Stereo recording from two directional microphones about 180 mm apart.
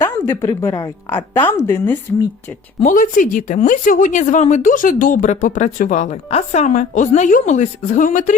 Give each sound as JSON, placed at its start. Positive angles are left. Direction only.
{"t": 0.0, "sound": "speech", "side_deg": 15}
{"t": 2.8, "sound": "speech", "side_deg": 45}